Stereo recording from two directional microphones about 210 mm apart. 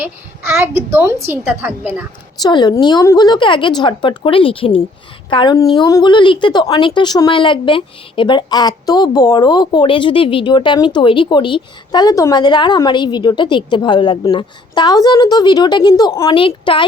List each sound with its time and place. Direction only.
0.0 s a child's voice: 10° right (ahead or behind)
2.4 s speech: 20° left (ahead or behind)